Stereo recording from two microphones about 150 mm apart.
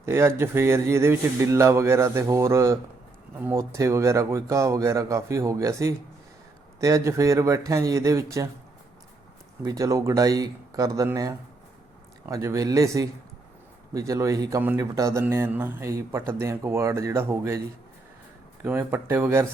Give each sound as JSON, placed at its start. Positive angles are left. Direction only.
{"t": 0.0, "sound": "speech", "side_deg": -15}
{"t": 9.6, "sound": "speech", "side_deg": -20}
{"t": 18.6, "sound": "speech", "side_deg": -15}